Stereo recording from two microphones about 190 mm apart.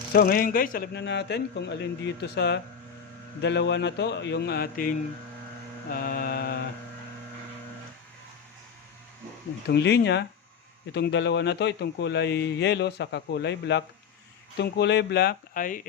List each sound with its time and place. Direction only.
0.1 s a man's voice: 50° left (ahead or behind)
5.9 s mantra: 50° left (ahead or behind)
9.6 s a man's voice: 65° left (ahead or behind); by 15.9 s 45° left (ahead or behind)